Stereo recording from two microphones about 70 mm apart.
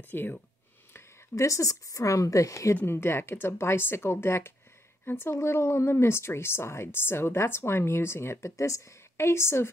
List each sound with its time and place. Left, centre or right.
0.1 s speech: left
0.9 s a woman's voice: left
2.7 s speech: left